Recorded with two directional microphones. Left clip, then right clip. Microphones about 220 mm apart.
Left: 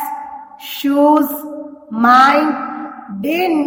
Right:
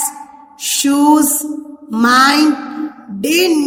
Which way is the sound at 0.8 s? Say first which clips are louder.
Even; 20° right (ahead or behind).